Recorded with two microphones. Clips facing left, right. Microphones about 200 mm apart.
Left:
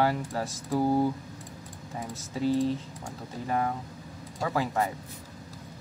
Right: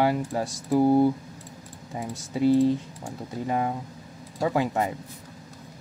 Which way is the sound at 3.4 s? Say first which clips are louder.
Right 2 dB; 15° right (ahead or behind).